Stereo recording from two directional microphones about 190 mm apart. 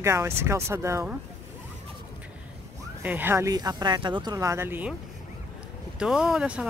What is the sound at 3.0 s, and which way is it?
Speech, 10° right (ahead or behind).